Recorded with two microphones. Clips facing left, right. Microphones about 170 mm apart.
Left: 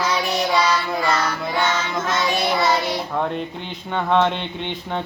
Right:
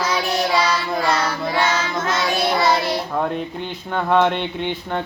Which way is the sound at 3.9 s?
5° right (ahead or behind).